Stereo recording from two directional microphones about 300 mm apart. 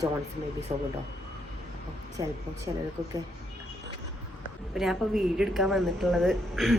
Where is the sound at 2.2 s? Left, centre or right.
Centre.